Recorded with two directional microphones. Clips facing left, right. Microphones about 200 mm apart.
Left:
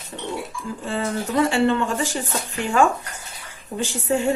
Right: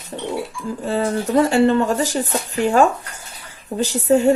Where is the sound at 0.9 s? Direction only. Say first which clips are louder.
Right 5 dB; 40° right (ahead or behind).